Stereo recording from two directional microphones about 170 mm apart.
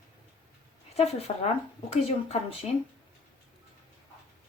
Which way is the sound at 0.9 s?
40° left (ahead or behind).